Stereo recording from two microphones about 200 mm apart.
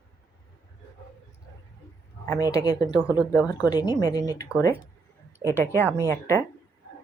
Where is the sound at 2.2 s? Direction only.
15° left (ahead or behind).